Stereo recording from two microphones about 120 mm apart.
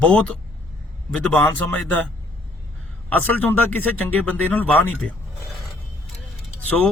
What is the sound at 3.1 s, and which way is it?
A man's voice, 15° left (ahead or behind).